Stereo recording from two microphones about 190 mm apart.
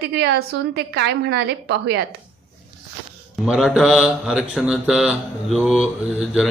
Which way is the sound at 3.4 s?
Centre (ahead or behind).